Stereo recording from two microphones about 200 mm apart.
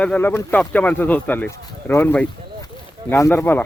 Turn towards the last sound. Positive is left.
turn(degrees=10)  # may be behind; listen again after turning